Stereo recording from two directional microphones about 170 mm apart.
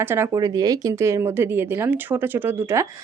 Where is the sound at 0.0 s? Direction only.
15° right (ahead or behind).